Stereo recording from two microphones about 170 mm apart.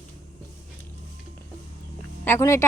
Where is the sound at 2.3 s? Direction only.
15° left (ahead or behind).